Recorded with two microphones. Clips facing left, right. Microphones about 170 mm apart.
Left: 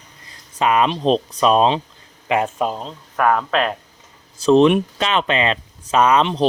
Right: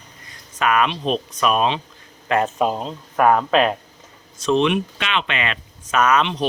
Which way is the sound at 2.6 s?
10° right (ahead or behind).